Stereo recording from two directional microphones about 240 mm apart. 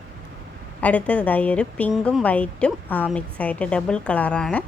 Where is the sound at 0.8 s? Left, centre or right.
Centre.